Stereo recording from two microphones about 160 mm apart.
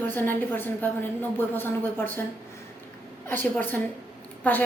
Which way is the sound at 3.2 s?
10° left (ahead or behind).